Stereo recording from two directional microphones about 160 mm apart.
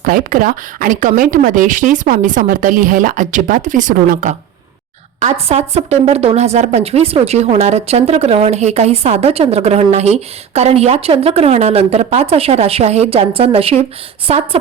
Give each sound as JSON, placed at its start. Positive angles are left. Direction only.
{"t": 0.0, "sound": "speech", "side_deg": -60}
{"t": 5.2, "sound": "speech", "side_deg": -40}